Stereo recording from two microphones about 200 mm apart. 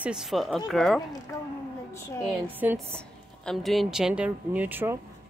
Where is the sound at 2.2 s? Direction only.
10° right (ahead or behind).